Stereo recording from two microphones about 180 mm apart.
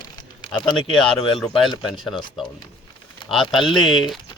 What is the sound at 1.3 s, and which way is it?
Speech, centre (ahead or behind).